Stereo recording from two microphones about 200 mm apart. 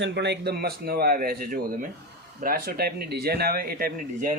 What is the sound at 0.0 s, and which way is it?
Speech, 60° right (ahead or behind).